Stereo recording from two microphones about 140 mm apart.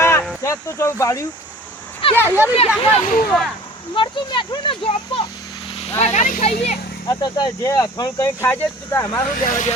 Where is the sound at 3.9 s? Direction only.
35° left (ahead or behind).